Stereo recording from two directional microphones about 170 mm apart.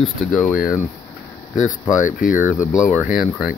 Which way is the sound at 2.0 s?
50° left (ahead or behind).